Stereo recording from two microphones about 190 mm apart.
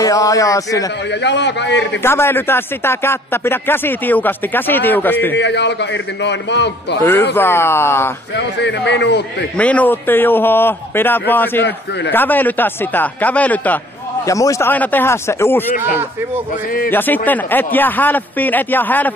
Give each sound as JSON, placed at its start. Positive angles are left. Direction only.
{"t": 0.0, "sound": "speech", "side_deg": 15}
{"t": 1.2, "sound": "a man's voice", "side_deg": 65}
{"t": 2.0, "sound": "speech", "side_deg": 10}
{"t": 5.3, "sound": "a man's voice", "side_deg": 65}
{"t": 7.3, "sound": "speech", "side_deg": 10}
{"t": 8.5, "sound": "a man's voice", "side_deg": 65}
{"t": 9.6, "sound": "speech", "side_deg": 5}
{"t": 16.9, "sound": "speech", "side_deg": 10}